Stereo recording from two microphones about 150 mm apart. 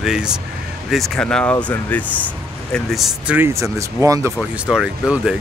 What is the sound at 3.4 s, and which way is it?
Speech, 20° right (ahead or behind).